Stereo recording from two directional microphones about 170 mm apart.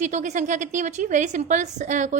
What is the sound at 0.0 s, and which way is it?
A woman's voice, 45° right (ahead or behind).